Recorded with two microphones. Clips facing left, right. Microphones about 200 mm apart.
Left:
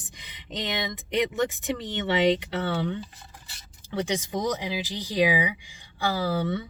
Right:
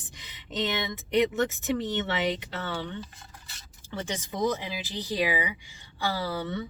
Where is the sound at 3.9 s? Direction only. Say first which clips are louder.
Left 5 dB; 15° left (ahead or behind).